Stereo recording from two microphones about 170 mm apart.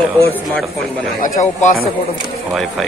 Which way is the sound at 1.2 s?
50° left (ahead or behind).